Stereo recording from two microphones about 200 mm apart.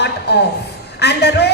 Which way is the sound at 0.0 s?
55° left (ahead or behind).